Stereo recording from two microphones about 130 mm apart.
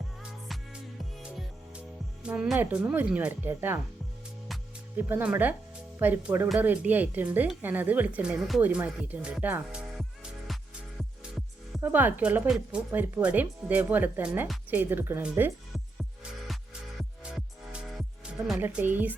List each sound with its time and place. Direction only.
0.2 s music: 5° right (ahead or behind)
2.2 s a woman's voice: 10° right (ahead or behind)
4.9 s a woman's voice: 15° right (ahead or behind)
10.0 s music: centre (ahead or behind)
11.8 s a woman's voice: 15° right (ahead or behind)
17.0 s music: centre (ahead or behind)
18.6 s a woman's voice: 15° right (ahead or behind)